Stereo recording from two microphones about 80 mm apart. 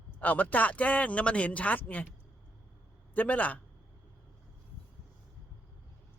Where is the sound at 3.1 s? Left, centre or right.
Centre.